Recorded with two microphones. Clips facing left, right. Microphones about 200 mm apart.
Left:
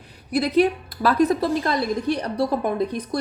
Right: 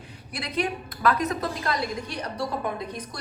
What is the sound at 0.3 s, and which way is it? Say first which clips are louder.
A woman's voice: left 10 dB; 35° left (ahead or behind).